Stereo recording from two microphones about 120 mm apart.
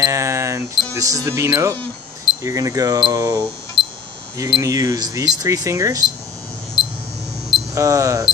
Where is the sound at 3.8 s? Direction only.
45° left (ahead or behind).